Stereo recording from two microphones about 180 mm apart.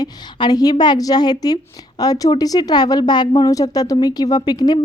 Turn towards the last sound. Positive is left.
turn(degrees=20)  # may be behind; listen again after turning